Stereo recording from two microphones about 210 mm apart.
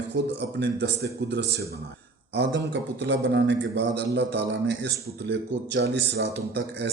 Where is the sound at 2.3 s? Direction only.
55° right (ahead or behind).